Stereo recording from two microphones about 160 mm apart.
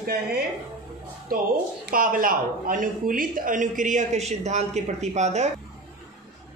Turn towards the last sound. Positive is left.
turn(degrees=-45)  # may be behind; listen again after turning